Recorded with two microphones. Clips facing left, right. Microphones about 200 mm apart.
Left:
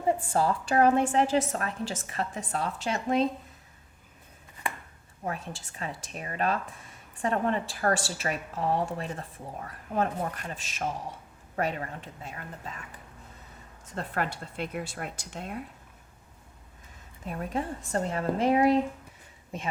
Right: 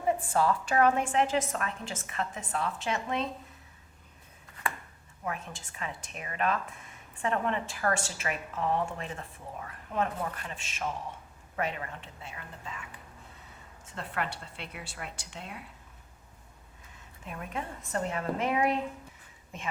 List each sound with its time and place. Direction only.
0.3 s a woman's voice: 30° left (ahead or behind)
5.2 s a woman's voice: 35° left (ahead or behind)
13.9 s a woman's voice: 40° left (ahead or behind)
17.2 s a woman's voice: 35° left (ahead or behind)